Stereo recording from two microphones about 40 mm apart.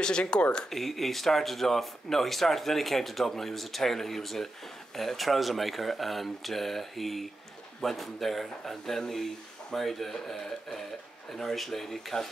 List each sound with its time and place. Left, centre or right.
0.0 s speech: left
0.7 s speech: centre